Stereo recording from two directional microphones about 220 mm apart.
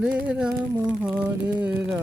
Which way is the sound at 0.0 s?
5° right (ahead or behind).